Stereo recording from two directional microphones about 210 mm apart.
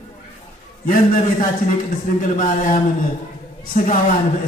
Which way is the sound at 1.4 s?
40° left (ahead or behind).